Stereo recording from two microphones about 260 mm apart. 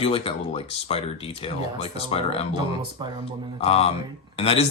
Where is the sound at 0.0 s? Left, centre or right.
Left.